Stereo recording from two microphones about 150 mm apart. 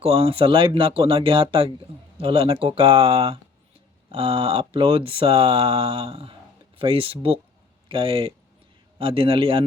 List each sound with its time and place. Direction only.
0.0 s speech: 40° right (ahead or behind)